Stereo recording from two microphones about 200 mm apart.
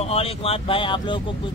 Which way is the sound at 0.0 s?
30° left (ahead or behind).